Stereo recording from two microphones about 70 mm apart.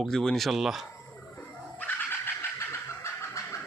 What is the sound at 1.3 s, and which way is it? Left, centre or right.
Vehicle, left.